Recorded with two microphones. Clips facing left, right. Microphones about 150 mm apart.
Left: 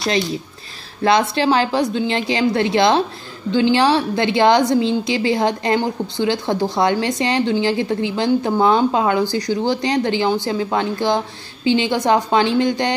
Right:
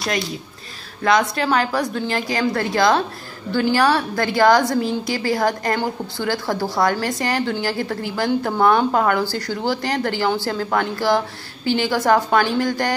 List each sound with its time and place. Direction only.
1.0 s a woman's voice: 30° left (ahead or behind)